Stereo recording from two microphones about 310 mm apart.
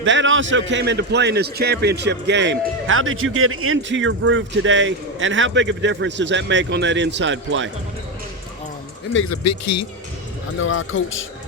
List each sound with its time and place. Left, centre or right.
0.0 s a man's voice: right
9.1 s speech: left
10.6 s a man's voice: left